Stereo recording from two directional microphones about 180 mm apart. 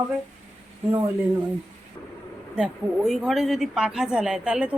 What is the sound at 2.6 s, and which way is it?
A woman's voice, 5° right (ahead or behind).